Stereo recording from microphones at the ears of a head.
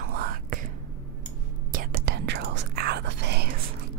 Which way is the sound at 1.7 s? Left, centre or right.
Right.